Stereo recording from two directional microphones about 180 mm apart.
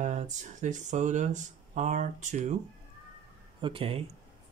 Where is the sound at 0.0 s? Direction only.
40° right (ahead or behind).